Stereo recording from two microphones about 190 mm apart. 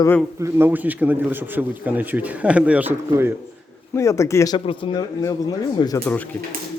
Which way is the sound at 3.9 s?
15° left (ahead or behind).